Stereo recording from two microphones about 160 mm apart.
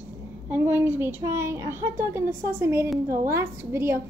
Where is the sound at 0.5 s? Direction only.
15° right (ahead or behind).